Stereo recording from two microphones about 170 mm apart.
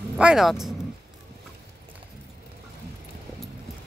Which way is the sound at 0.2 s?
5° right (ahead or behind).